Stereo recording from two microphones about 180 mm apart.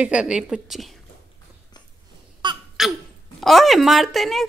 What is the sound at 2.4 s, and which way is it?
Babbling, 25° right (ahead or behind).